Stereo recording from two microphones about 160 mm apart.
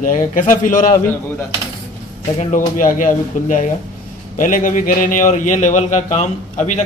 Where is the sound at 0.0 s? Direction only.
55° left (ahead or behind).